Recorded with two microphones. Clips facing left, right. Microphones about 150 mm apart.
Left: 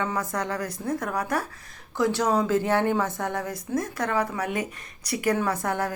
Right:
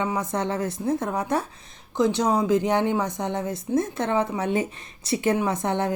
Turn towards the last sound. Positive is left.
turn(degrees=-25)  # may be behind; listen again after turning